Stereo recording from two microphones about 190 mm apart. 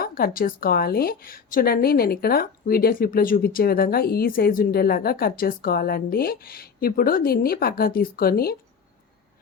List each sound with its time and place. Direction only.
0.0 s a woman's voice: 50° left (ahead or behind)